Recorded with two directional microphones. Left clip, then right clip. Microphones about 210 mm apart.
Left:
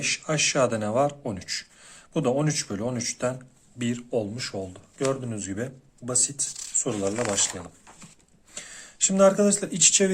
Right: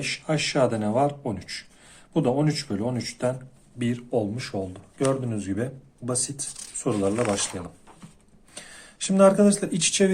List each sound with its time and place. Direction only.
0.0 s speech: 25° left (ahead or behind)